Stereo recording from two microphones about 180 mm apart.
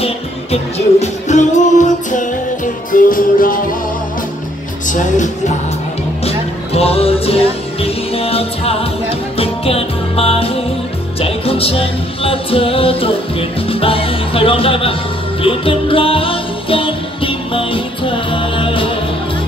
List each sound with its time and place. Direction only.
0.0 s music: 35° left (ahead or behind)
4.8 s speech: 45° left (ahead or behind)
6.2 s music: 35° left (ahead or behind)